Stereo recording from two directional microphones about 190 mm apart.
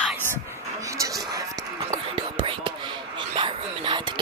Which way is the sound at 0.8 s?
15° right (ahead or behind).